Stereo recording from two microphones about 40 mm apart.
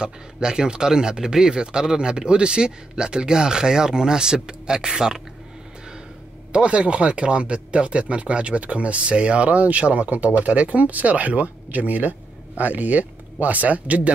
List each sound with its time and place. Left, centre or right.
0.0 s speech: centre
6.5 s speech: right